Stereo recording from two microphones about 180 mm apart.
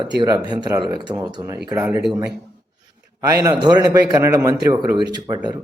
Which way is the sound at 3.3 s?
15° right (ahead or behind).